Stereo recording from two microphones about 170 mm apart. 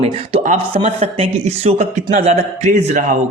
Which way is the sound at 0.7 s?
35° right (ahead or behind).